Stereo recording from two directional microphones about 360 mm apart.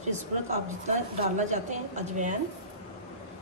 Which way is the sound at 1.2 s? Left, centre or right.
Centre.